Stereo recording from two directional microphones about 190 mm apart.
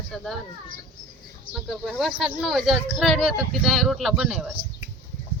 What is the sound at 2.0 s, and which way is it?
Speech, centre (ahead or behind).